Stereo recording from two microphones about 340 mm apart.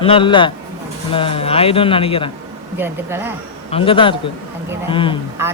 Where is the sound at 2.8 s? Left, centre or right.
Centre.